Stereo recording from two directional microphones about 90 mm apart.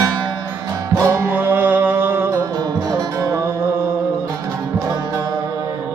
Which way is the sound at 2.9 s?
45° right (ahead or behind).